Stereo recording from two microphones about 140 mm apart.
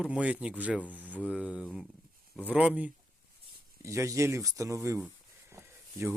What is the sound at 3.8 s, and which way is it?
Speech, 20° right (ahead or behind).